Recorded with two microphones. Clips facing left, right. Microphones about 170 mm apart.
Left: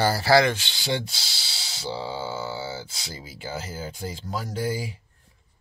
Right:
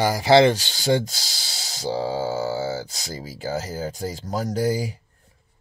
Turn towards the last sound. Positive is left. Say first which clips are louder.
# right 6 dB
turn(degrees=-40)  # may be behind; listen again after turning